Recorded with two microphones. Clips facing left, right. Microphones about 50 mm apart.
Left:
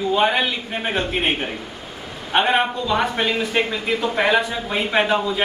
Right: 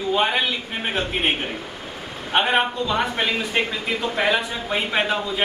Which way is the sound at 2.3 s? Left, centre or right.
Centre.